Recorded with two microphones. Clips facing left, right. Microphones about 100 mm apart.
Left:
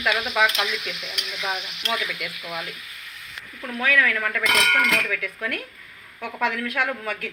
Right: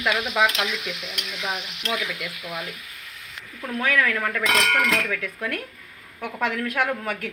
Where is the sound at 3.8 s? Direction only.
25° right (ahead or behind).